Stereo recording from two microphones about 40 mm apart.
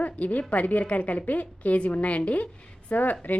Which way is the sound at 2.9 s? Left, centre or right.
Left.